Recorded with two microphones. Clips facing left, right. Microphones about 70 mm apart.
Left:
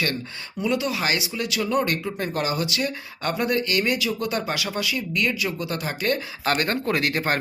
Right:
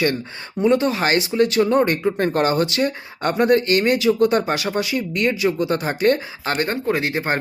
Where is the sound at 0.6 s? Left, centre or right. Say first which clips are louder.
Right 7 dB; right.